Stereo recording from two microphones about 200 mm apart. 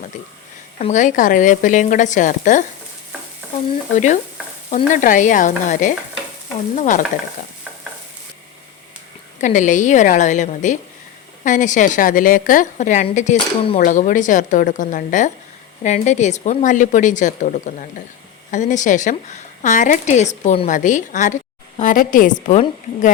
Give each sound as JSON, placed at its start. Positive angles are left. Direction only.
{"t": 0.8, "sound": "a woman's voice", "side_deg": 35}
{"t": 3.9, "sound": "a woman's voice", "side_deg": 35}
{"t": 9.4, "sound": "a woman's voice", "side_deg": 40}